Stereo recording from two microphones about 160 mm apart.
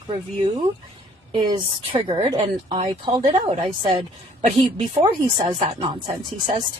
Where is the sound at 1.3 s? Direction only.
30° right (ahead or behind).